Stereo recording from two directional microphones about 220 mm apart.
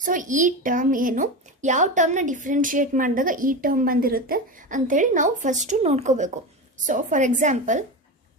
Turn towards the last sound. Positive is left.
turn(degrees=-35)  # may be behind; listen again after turning